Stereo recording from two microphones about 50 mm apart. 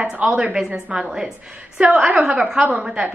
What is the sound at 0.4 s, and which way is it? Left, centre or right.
A woman's voice, centre.